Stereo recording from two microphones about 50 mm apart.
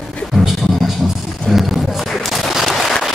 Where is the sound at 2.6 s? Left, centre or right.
Centre.